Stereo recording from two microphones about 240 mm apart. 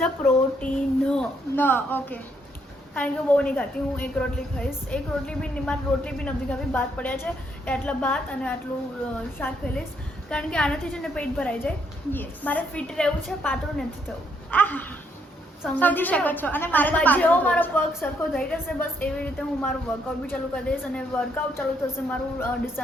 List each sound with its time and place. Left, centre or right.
0.0 s a woman's voice: centre